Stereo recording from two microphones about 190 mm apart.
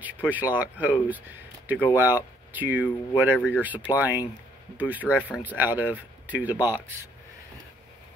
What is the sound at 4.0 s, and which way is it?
Speech, 20° left (ahead or behind).